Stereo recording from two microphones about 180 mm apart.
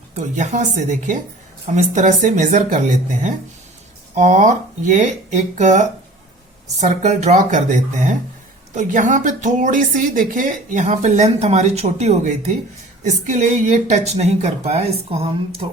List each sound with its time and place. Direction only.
0.1 s a woman's voice: 40° right (ahead or behind)